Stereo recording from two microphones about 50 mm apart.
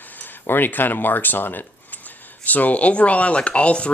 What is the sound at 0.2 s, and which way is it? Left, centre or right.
Speech, left.